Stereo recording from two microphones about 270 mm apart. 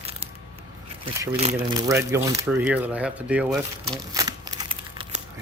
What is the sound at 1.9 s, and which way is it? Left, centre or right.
Speech, centre.